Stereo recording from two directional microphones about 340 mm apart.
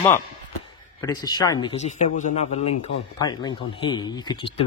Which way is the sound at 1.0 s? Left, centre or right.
Centre.